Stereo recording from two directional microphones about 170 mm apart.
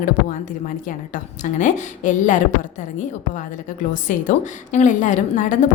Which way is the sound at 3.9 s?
50° left (ahead or behind).